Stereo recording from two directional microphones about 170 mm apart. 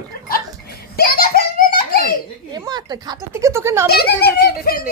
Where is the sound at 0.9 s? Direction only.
65° left (ahead or behind).